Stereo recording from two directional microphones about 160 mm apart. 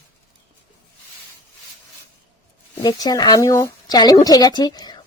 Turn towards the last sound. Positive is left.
turn(degrees=25)  # may be behind; listen again after turning